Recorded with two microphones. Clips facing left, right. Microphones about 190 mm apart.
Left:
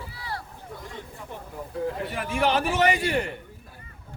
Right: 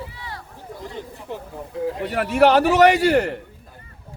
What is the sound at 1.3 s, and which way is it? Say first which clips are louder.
A man's voice: right 4 dB; 80° right.